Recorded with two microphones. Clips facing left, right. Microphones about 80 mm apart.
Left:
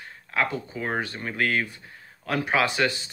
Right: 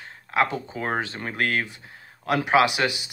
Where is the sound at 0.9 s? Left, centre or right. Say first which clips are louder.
Right 2 dB; right.